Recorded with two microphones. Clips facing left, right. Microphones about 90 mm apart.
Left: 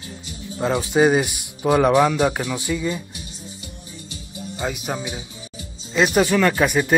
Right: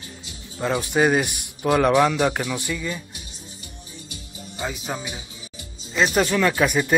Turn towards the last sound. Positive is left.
turn(degrees=5)  # may be behind; listen again after turning